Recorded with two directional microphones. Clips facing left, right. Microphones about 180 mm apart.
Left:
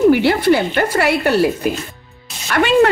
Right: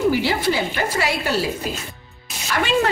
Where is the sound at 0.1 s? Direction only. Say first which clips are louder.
Left 8 dB; 60° left (ahead or behind).